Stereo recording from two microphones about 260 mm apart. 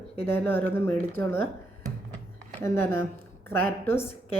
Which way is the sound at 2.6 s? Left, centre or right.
Centre.